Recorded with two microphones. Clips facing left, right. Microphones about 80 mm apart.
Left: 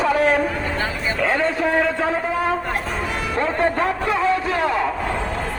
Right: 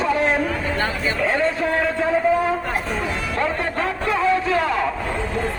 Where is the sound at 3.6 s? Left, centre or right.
Left.